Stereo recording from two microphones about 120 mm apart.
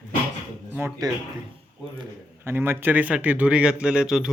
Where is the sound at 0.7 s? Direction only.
20° right (ahead or behind).